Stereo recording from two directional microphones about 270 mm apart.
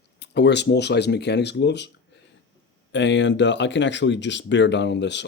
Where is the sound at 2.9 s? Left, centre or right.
Left.